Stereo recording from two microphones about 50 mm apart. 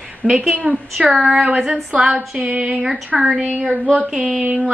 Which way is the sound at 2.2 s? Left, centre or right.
Right.